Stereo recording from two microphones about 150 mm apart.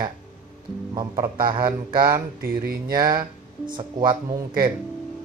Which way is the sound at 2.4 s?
80° right.